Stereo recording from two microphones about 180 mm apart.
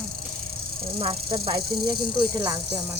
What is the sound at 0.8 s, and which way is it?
Speech, 30° right (ahead or behind).